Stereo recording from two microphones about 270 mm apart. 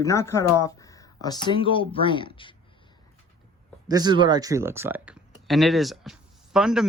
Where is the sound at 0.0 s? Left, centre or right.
Centre.